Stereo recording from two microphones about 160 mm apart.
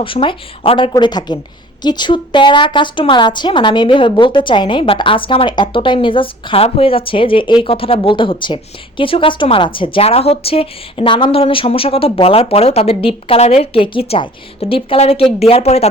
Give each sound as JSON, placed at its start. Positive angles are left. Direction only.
{"t": 0.0, "sound": "a woman's voice", "side_deg": 35}